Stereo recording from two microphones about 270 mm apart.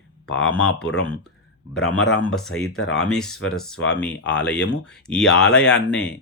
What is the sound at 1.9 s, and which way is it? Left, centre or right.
Speech, left.